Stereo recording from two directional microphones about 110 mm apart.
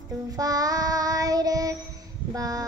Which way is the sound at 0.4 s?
35° right (ahead or behind).